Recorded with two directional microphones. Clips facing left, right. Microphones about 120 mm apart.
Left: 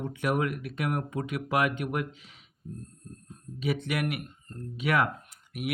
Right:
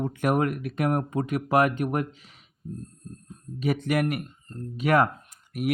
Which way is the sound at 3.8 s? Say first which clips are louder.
Right 6 dB; 40° right (ahead or behind).